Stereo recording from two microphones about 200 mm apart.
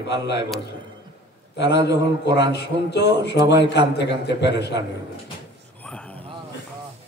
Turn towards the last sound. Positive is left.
turn(degrees=5)  # may be behind; listen again after turning